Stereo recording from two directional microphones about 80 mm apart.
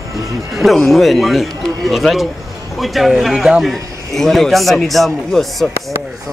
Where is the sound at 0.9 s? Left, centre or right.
Centre.